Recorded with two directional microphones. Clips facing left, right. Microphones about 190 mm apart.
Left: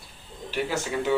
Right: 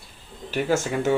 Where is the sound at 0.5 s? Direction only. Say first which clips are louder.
Right 5 dB; 45° right (ahead or behind).